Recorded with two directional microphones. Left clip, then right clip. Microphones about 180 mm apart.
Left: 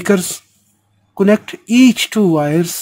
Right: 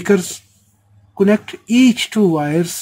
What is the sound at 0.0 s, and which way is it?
Speech, 40° left (ahead or behind).